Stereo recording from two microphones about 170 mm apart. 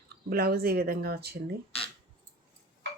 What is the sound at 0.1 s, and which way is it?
Speech, 65° right (ahead or behind).